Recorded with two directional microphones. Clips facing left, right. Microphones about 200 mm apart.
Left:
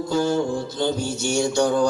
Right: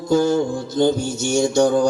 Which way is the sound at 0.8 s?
45° right (ahead or behind).